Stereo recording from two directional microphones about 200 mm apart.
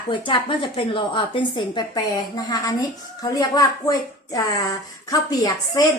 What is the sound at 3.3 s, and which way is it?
A woman's voice, 15° left (ahead or behind).